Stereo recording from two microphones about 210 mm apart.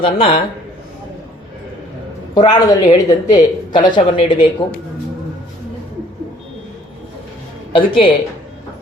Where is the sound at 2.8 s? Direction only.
35° left (ahead or behind).